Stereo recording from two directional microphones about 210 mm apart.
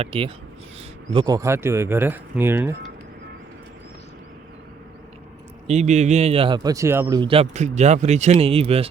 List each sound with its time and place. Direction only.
0.0 s speech: 25° right (ahead or behind); by 2.7 s 10° right (ahead or behind)
5.6 s speech: 30° right (ahead or behind)